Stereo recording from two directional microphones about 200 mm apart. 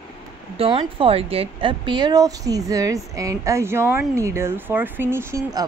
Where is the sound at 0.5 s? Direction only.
30° right (ahead or behind).